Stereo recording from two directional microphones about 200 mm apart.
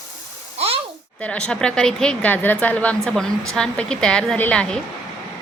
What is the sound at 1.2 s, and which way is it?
A woman's voice, 5° left (ahead or behind).